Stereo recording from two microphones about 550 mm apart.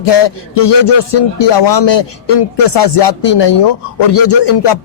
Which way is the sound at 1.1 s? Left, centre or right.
Left.